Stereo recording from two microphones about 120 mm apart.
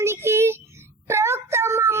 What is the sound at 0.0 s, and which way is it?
Child singing, 20° right (ahead or behind).